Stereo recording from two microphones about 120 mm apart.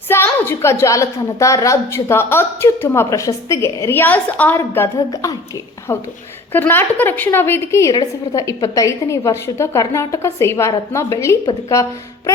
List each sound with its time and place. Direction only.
0.3 s a woman's voice: 15° left (ahead or behind)